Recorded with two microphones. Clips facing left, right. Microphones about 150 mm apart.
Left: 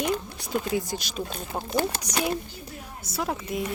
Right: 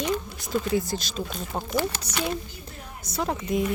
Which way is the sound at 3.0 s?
5° left (ahead or behind).